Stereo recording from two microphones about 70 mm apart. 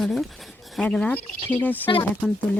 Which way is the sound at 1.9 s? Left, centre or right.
Left.